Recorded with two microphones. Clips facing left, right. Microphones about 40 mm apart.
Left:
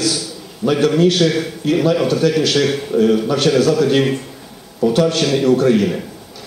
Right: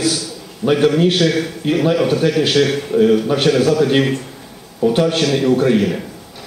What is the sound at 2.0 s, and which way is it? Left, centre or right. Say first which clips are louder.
Speech: even; right.